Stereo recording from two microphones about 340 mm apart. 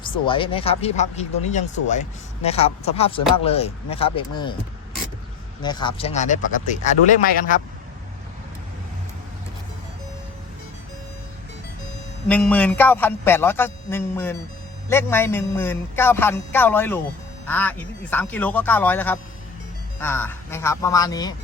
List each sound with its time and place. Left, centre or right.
0.3 s speech: centre
5.6 s speech: centre
12.3 s a man's voice: centre